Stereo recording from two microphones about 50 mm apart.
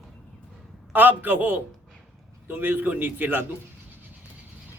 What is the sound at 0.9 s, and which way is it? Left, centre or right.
A man's voice, right.